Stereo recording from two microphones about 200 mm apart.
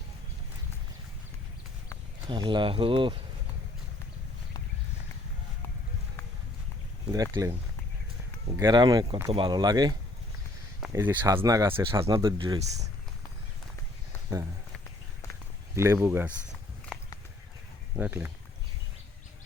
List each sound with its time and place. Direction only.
2.3 s speech: 25° right (ahead or behind)
7.1 s speech: 15° right (ahead or behind)
8.5 s speech: 20° right (ahead or behind)
15.7 s speech: 15° right (ahead or behind)
17.9 s speech: 10° right (ahead or behind)